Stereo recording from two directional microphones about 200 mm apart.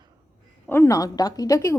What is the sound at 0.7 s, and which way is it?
A woman's voice, 15° left (ahead or behind).